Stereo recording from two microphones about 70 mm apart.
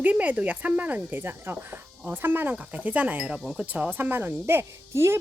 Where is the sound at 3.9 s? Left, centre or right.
Right.